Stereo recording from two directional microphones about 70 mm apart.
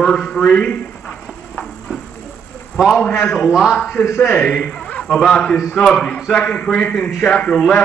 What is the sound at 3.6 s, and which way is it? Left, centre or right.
Speech, centre.